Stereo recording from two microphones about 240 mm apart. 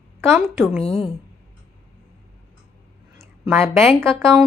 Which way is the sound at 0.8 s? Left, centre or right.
Left.